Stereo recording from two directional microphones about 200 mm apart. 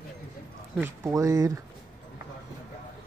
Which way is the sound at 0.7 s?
10° right (ahead or behind).